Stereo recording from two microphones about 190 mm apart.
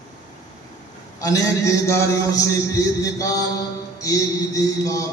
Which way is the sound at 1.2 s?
15° left (ahead or behind).